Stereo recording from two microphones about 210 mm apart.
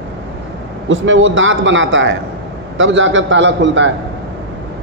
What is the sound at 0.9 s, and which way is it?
Speech, 65° right (ahead or behind).